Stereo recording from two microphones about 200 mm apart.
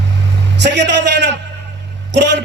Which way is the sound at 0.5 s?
60° right (ahead or behind).